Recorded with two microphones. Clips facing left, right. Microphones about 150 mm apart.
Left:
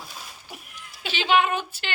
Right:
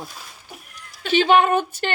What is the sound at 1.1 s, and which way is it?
Speech, 50° right (ahead or behind).